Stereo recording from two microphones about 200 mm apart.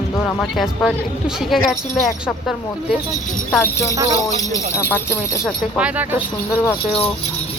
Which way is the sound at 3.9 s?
15° right (ahead or behind).